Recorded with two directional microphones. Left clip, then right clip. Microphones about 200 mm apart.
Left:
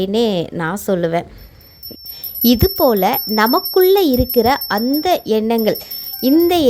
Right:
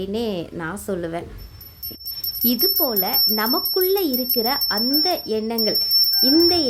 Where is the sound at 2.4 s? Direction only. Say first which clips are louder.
Left 8 dB; 35° left (ahead or behind).